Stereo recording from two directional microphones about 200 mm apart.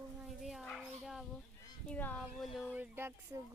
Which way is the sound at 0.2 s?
Centre (ahead or behind).